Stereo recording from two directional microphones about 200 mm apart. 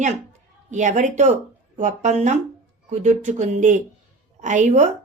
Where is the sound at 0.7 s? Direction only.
40° right (ahead or behind).